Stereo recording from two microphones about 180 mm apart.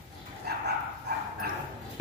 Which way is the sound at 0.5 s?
60° right (ahead or behind).